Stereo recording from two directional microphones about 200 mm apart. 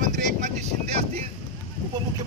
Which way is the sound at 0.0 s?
35° right (ahead or behind).